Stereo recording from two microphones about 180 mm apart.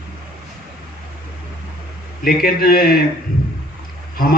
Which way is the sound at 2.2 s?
55° left (ahead or behind).